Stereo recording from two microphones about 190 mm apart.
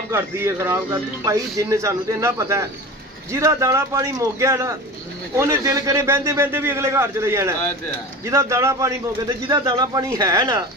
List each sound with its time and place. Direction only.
0.1 s a man's voice: 15° right (ahead or behind)